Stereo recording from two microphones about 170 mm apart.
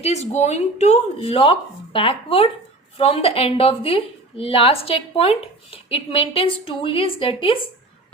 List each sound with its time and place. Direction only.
0.0 s a woman's voice: 40° left (ahead or behind)